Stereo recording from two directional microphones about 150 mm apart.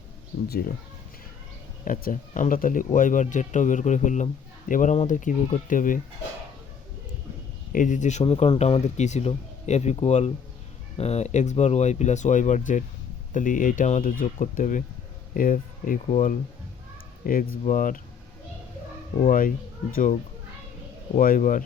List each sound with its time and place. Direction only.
0.4 s speech: 90° left
1.8 s speech: 65° left (ahead or behind)
7.7 s speech: 60° left (ahead or behind)
16.0 s speech: 50° left (ahead or behind)
17.2 s speech: 65° left (ahead or behind)
19.3 s speech: 65° left (ahead or behind)
21.2 s speech: 65° left (ahead or behind)